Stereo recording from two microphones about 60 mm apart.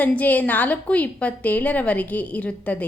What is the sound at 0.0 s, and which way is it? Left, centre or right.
A woman's voice, left.